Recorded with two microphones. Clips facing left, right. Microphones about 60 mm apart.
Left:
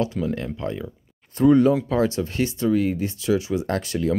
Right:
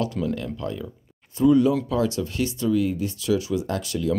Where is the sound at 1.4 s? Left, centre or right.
Left.